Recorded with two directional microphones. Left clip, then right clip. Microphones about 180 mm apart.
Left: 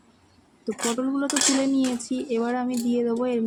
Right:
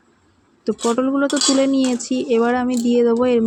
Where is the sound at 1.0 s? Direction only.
25° right (ahead or behind).